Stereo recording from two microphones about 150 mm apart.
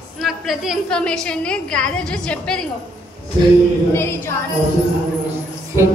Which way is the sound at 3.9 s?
15° left (ahead or behind).